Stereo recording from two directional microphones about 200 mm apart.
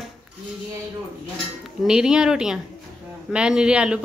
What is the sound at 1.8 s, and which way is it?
Speech, 5° right (ahead or behind).